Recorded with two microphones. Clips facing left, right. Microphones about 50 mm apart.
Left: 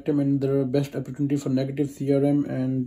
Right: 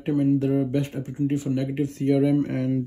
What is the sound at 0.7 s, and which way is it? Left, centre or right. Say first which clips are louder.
Speech: left 1 dB; right.